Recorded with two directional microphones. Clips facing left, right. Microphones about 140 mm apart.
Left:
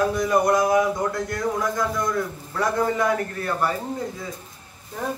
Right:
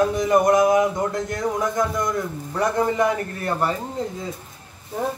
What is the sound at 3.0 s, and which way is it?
Speech, 20° right (ahead or behind).